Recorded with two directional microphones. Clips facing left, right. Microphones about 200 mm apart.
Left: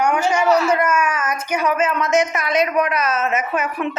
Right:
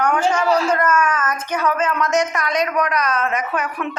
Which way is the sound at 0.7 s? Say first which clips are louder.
Even; 10° left (ahead or behind).